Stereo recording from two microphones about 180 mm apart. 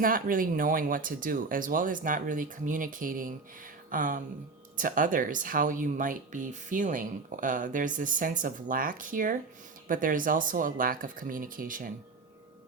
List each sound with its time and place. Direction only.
0.0 s speech: 50° right (ahead or behind)
3.8 s a sound: 45° right (ahead or behind)
4.8 s speech: 50° right (ahead or behind)